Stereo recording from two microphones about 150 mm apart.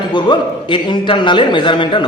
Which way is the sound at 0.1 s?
30° left (ahead or behind).